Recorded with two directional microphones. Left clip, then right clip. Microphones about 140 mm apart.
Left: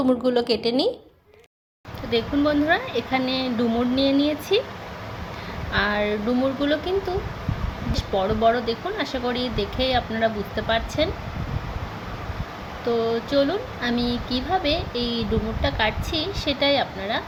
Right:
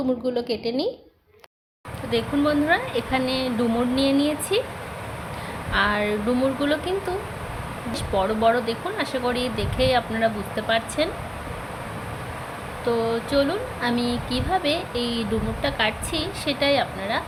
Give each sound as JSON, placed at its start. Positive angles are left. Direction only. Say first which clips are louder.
{"t": 0.2, "sound": "a woman's voice", "louder": "left 4 dB", "side_deg": 20}
{"t": 2.0, "sound": "speech", "louder": "left 1 dB", "side_deg": 10}
{"t": 5.7, "sound": "speech", "louder": "right 1 dB", "side_deg": 5}
{"t": 7.9, "sound": "speech", "louder": "even", "side_deg": 5}
{"t": 12.9, "sound": "speech", "louder": "left 1 dB", "side_deg": 10}